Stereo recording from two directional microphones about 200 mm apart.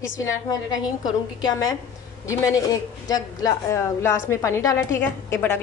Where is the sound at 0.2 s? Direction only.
15° left (ahead or behind).